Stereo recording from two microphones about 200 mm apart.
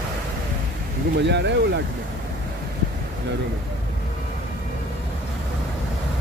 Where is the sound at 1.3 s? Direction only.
60° right (ahead or behind).